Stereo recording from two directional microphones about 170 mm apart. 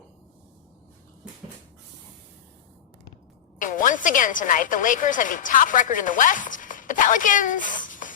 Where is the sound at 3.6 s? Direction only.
50° left (ahead or behind).